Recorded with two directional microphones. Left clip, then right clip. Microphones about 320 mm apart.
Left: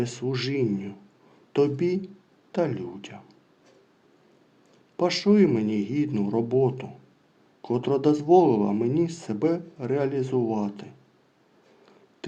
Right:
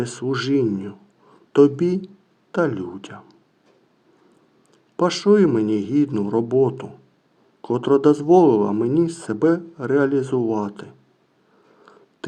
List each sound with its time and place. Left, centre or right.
0.0 s speech: right
4.9 s speech: right